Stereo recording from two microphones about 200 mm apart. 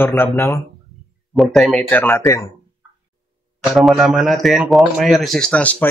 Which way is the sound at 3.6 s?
Centre (ahead or behind).